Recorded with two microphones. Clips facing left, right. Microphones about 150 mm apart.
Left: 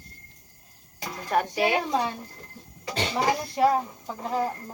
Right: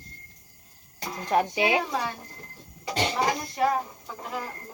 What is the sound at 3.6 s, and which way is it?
Speech, 30° left (ahead or behind).